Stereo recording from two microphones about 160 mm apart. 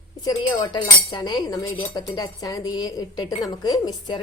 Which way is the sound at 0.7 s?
25° left (ahead or behind).